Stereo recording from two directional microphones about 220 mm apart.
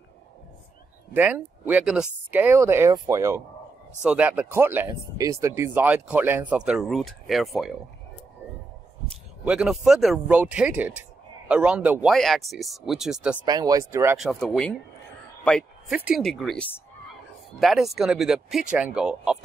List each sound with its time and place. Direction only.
1.1 s speech: 5° right (ahead or behind)
9.4 s speech: 5° right (ahead or behind)
13.5 s speech: 15° right (ahead or behind)
14.1 s speech: centre (ahead or behind)
15.9 s speech: 5° right (ahead or behind)